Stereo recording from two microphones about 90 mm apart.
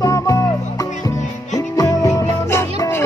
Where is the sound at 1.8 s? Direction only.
40° left (ahead or behind).